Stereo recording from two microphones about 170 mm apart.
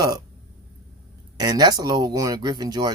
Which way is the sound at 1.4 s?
25° right (ahead or behind).